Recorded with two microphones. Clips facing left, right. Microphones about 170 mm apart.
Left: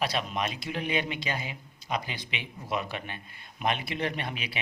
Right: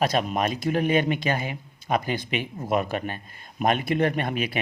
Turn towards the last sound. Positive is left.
turn(degrees=-50)  # may be behind; listen again after turning